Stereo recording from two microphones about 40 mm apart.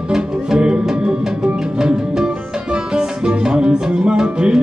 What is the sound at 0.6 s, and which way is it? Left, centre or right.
Music, right.